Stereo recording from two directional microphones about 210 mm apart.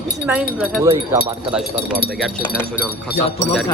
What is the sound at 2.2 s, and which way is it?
Speech, 5° right (ahead or behind).